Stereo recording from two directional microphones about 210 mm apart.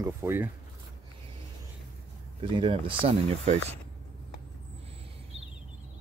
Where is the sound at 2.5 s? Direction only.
25° right (ahead or behind).